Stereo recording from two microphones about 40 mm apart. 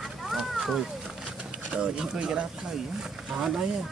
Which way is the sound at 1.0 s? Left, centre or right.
Right.